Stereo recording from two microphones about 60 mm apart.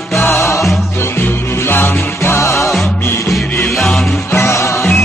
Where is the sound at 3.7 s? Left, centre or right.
Centre.